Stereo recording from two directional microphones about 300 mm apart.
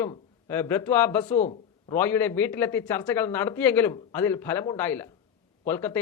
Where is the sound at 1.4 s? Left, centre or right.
Left.